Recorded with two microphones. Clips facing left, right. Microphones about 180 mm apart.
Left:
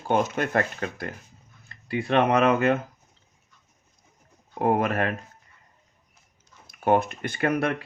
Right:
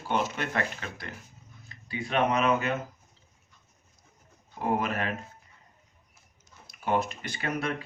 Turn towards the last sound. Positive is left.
turn(degrees=60)  # may be behind; listen again after turning